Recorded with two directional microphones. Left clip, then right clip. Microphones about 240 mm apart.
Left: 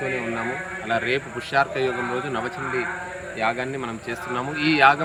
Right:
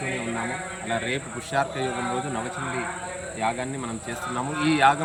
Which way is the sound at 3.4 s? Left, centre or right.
Centre.